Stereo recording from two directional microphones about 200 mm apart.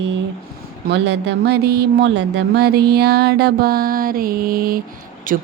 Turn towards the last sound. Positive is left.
turn(degrees=-45)  # may be behind; listen again after turning